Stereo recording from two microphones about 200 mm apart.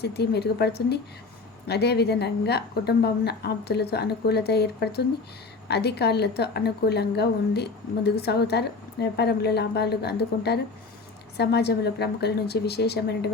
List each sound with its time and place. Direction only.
0.0 s a woman's voice: 55° left (ahead or behind)